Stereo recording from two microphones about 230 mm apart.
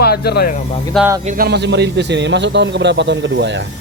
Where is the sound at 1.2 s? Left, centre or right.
Right.